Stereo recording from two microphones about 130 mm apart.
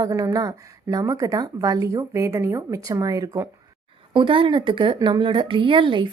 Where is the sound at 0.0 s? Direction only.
25° right (ahead or behind).